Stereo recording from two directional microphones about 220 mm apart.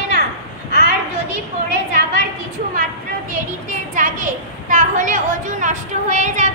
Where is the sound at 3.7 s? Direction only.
35° right (ahead or behind).